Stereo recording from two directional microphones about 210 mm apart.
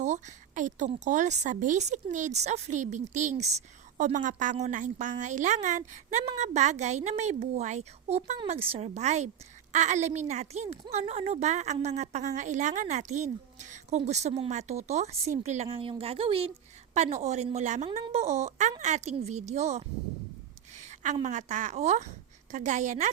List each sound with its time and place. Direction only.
0.0 s a woman's voice: 35° right (ahead or behind)